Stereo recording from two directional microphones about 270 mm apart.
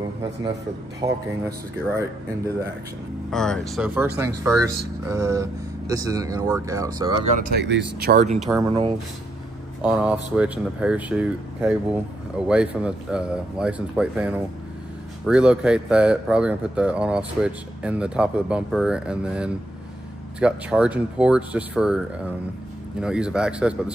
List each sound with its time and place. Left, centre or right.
1.0 s speech: right
3.3 s speech: centre
7.3 s speech: right
8.4 s speech: centre